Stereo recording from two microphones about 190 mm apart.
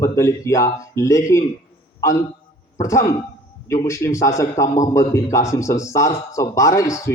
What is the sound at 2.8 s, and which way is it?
Speech, 15° left (ahead or behind).